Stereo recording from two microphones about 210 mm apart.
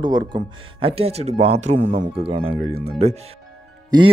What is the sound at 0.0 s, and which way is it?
Speech, 20° right (ahead or behind).